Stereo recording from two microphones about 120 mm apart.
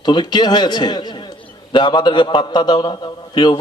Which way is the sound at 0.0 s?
40° left (ahead or behind).